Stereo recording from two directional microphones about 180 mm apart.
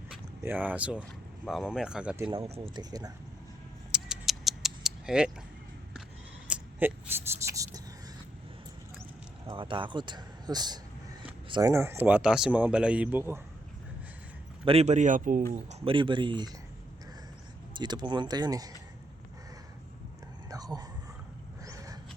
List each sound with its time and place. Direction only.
0.1 s speech: 10° right (ahead or behind)
2.6 s speech: 20° right (ahead or behind)
3.9 s a sound: centre (ahead or behind)
6.5 s a sound: 10° right (ahead or behind)
9.6 s speech: 25° right (ahead or behind)
11.4 s a sound: 25° right (ahead or behind)
11.7 s speech: 15° right (ahead or behind)
14.6 s speech: 35° right (ahead or behind)
15.7 s speech: 30° right (ahead or behind)
17.7 s speech: 25° right (ahead or behind)
21.6 s vehicle: 20° right (ahead or behind)